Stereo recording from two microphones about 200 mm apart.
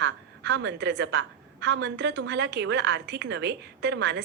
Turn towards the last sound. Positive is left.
turn(degrees=-60)  # may be behind; listen again after turning